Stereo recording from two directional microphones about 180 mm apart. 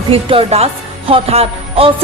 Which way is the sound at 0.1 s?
30° right (ahead or behind).